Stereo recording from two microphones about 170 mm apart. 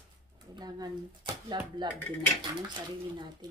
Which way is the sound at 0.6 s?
25° right (ahead or behind).